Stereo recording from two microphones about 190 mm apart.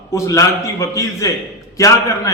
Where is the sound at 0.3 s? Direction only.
15° left (ahead or behind).